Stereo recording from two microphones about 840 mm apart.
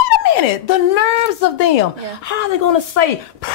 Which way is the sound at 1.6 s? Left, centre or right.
Left.